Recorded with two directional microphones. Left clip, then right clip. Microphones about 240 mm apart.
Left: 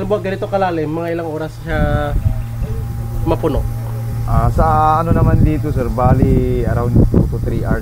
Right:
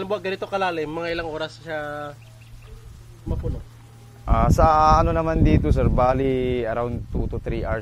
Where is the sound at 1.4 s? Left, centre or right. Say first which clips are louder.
Left 7 dB; centre.